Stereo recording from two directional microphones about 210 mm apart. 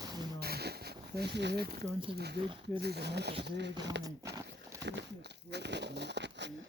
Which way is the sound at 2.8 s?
50° right (ahead or behind).